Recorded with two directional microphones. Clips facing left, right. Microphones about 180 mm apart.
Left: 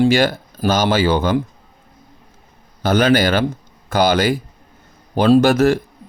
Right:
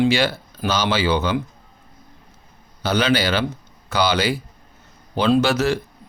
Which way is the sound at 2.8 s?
50° left (ahead or behind).